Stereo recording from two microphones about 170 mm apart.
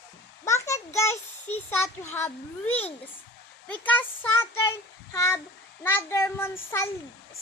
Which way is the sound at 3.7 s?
10° left (ahead or behind).